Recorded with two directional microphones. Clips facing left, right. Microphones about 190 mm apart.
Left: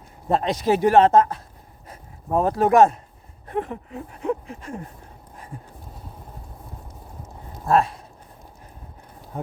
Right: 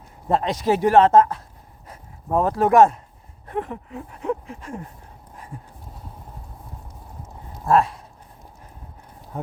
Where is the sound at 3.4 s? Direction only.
25° left (ahead or behind).